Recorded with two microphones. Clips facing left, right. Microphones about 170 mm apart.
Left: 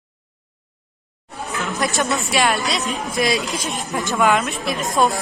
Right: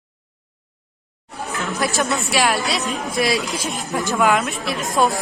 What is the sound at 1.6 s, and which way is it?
Speech, centre (ahead or behind).